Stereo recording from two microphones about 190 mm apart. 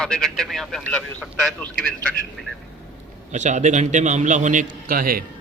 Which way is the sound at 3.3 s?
40° right (ahead or behind).